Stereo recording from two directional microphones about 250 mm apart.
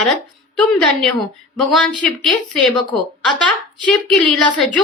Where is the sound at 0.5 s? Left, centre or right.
Centre.